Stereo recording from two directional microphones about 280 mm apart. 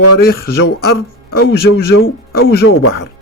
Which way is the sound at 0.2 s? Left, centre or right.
Left.